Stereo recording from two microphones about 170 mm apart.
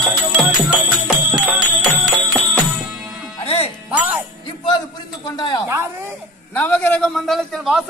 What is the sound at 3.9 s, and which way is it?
Music, 5° right (ahead or behind).